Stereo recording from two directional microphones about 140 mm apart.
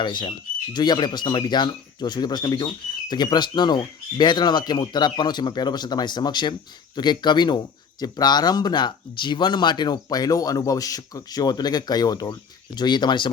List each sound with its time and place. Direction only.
0.0 s speech: 35° left (ahead or behind)